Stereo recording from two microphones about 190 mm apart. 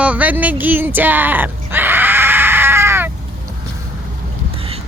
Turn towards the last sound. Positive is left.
turn(degrees=-30)  # may be behind; listen again after turning